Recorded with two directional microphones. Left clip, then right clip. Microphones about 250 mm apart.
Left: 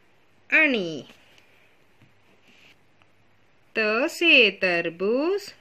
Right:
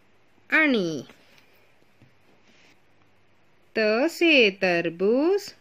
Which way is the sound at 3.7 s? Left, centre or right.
Right.